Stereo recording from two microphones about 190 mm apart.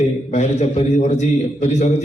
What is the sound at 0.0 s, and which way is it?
A man's voice, 35° left (ahead or behind).